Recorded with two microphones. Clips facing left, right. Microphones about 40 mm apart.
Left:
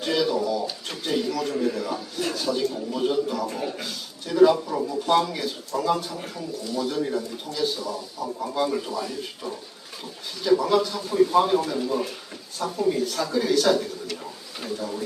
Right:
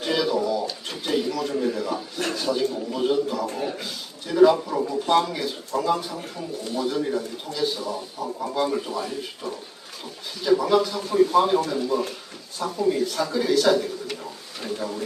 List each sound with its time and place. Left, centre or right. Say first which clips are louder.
0.0 s a man's voice: even; centre
7.8 s a man's voice: right 1 dB; right
8.4 s a man's voice: right 1 dB; centre
8.9 s speech: right 1 dB; right
10.4 s speech: right 1 dB; centre
14.8 s speech: right 1 dB; right